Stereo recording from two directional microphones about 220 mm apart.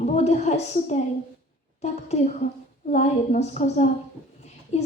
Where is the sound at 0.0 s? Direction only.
30° left (ahead or behind).